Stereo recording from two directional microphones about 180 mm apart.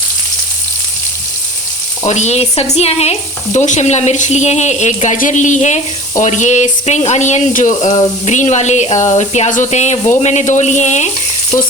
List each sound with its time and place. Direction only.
2.0 s sizzle: 40° left (ahead or behind)